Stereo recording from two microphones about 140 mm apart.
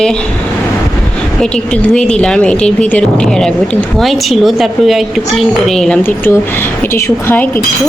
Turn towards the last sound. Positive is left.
turn(degrees=15)  # may be behind; listen again after turning